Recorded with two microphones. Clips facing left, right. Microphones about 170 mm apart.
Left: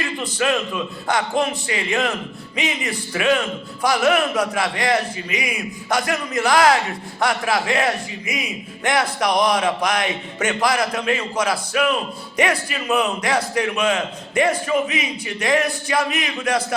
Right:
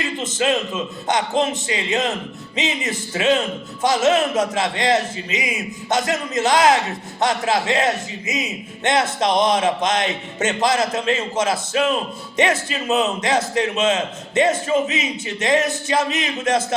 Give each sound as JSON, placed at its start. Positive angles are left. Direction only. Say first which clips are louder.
{"t": 0.0, "sound": "a man's voice", "louder": "right 1 dB", "side_deg": -20}